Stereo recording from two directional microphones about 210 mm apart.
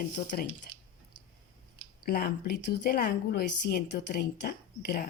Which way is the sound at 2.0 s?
50° left (ahead or behind).